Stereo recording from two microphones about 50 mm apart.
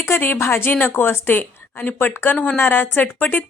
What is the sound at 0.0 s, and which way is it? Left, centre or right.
A woman's voice, left.